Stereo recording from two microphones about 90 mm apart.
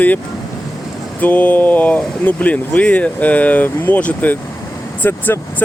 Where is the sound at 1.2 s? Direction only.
20° left (ahead or behind).